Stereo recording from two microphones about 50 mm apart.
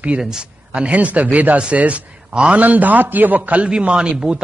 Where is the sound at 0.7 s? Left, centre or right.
Right.